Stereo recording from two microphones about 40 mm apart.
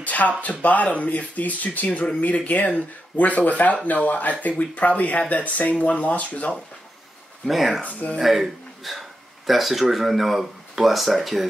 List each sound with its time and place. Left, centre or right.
0.0 s a sound: left
0.4 s speech: left
7.4 s speech: centre
7.8 s speech: left
8.2 s speech: centre